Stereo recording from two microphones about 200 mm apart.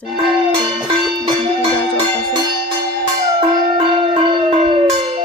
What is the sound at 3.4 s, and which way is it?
Music, 30° right (ahead or behind).